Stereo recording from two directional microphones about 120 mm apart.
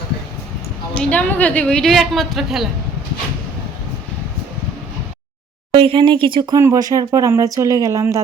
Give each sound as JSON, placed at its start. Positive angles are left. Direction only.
{"t": 0.9, "sound": "a woman's voice", "side_deg": 10}
{"t": 5.7, "sound": "speech", "side_deg": -50}
{"t": 6.6, "sound": "speech", "side_deg": -25}